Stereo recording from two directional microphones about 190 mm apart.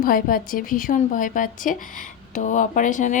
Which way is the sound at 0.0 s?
45° left (ahead or behind).